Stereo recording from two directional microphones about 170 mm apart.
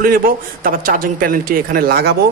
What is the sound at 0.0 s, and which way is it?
Speech, 55° right (ahead or behind).